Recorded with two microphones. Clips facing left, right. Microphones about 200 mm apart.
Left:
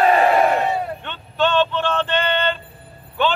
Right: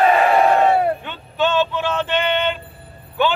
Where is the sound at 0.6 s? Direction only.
65° right (ahead or behind).